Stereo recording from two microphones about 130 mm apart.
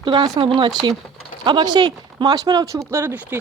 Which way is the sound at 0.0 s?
35° right (ahead or behind).